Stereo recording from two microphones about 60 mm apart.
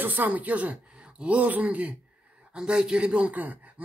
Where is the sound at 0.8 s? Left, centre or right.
Centre.